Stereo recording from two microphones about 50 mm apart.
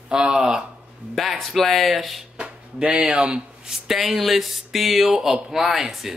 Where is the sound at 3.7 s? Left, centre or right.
Centre.